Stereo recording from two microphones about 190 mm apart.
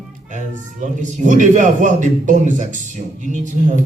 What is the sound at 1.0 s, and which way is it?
A man's voice, 40° right (ahead or behind).